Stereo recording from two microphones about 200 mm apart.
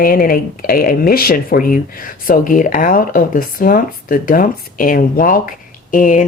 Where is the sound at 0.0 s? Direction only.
45° left (ahead or behind).